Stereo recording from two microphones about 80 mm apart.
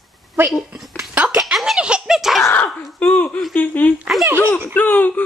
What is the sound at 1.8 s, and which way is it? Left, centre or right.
Giggle, centre.